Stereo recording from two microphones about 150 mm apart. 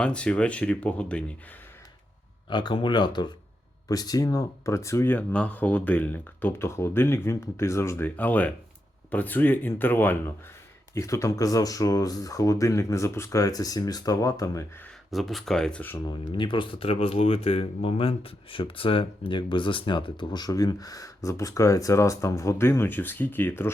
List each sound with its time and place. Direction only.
0.0 s speech: 5° left (ahead or behind)
2.5 s speech: 30° left (ahead or behind)
15.1 s speech: centre (ahead or behind)
16.0 s speech: 30° left (ahead or behind); by 23.7 s 15° left (ahead or behind)